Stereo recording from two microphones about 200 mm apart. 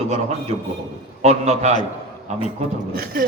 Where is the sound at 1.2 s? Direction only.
35° right (ahead or behind).